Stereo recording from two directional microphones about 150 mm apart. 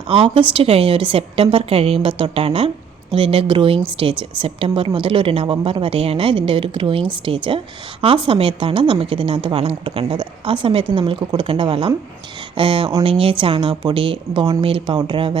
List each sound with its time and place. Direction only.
0.1 s a woman's voice: 35° right (ahead or behind)